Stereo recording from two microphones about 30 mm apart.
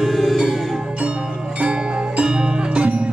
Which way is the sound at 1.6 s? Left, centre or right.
Right.